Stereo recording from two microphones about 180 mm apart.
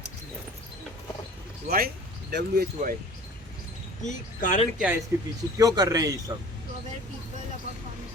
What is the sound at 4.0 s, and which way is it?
Speech, 45° left (ahead or behind).